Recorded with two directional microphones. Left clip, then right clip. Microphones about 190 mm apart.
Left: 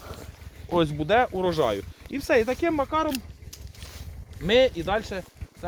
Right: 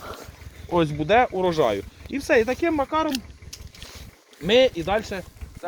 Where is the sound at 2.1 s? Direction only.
15° right (ahead or behind).